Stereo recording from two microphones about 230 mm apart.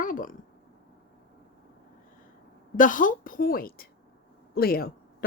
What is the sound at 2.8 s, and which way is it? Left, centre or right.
A woman's voice, left.